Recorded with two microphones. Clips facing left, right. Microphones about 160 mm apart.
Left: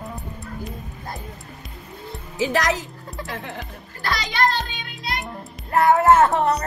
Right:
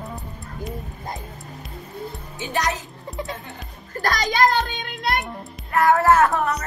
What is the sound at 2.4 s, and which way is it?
Speech, 90° left.